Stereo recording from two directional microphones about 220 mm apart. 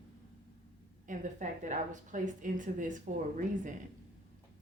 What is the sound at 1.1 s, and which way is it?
A woman's voice, 35° right (ahead or behind).